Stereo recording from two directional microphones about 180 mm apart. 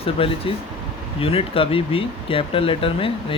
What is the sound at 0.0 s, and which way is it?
Speech, 30° left (ahead or behind).